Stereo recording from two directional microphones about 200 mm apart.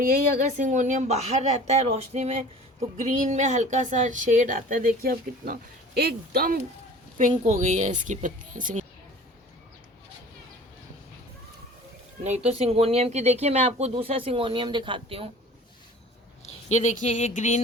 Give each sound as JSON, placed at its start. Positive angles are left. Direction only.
{"t": 0.0, "sound": "speech", "side_deg": -40}
{"t": 7.2, "sound": "speech", "side_deg": -35}
{"t": 12.2, "sound": "speech", "side_deg": -35}
{"t": 16.6, "sound": "speech", "side_deg": 35}